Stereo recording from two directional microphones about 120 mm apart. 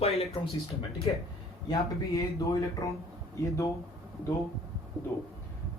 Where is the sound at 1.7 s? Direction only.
30° left (ahead or behind).